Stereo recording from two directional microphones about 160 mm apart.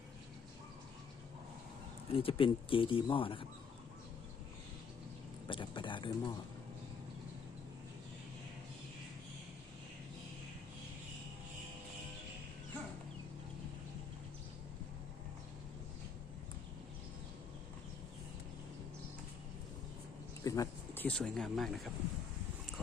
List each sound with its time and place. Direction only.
2.0 s speech: 35° left (ahead or behind)
5.5 s speech: 30° left (ahead or behind)
20.4 s a sound: 20° left (ahead or behind); by 21.7 s centre (ahead or behind)